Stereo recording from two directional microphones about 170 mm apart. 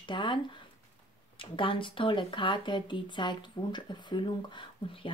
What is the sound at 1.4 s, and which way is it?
Speech, 30° left (ahead or behind).